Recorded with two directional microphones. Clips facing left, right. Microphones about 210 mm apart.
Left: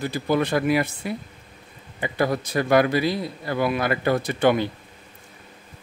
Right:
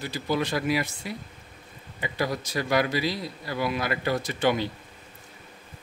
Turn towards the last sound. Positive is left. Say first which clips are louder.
# left 5 dB
turn(degrees=55)  # may be behind; listen again after turning